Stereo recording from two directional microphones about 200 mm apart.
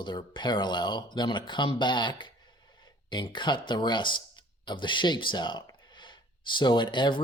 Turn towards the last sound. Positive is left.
turn(degrees=25)  # may be behind; listen again after turning